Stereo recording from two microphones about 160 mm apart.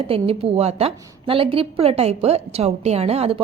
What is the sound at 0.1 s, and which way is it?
A woman's voice, 35° right (ahead or behind).